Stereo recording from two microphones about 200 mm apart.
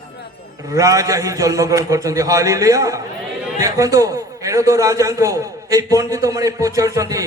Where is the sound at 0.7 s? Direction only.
15° right (ahead or behind).